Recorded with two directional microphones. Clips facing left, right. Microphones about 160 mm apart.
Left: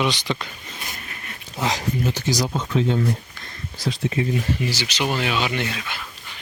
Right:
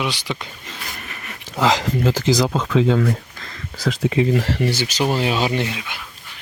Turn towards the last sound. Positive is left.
turn(degrees=-15)  # may be behind; listen again after turning